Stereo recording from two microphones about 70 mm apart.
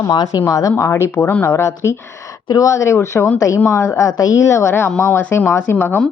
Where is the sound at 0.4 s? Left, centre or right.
Left.